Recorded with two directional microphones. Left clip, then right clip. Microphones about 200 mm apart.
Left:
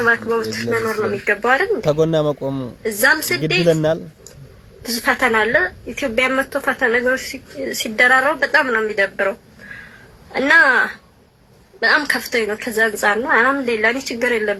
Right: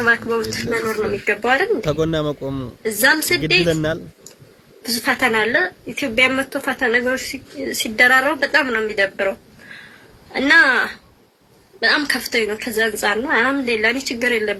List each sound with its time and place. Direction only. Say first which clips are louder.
0.0 s speech: left 1 dB; 20° right (ahead or behind)
1.9 s speech: left 4 dB; 10° left (ahead or behind)
2.4 s a woman's voice: left 2 dB; 15° right (ahead or behind)
3.7 s speech: left 4 dB; 10° left (ahead or behind)
4.9 s speech: left 1 dB; 15° right (ahead or behind)
10.3 s speech: left 1 dB; 20° right (ahead or behind)